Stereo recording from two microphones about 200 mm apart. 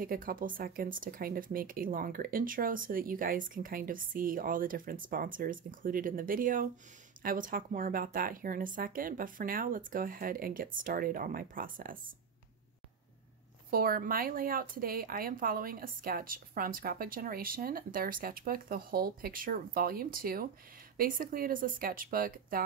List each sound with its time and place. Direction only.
0.0 s speech: 45° right (ahead or behind)
13.7 s speech: 45° right (ahead or behind)